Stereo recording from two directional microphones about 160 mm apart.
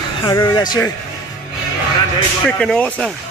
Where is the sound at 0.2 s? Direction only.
25° left (ahead or behind).